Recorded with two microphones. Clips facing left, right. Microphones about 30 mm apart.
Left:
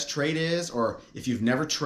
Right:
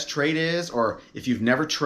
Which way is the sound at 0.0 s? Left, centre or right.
Centre.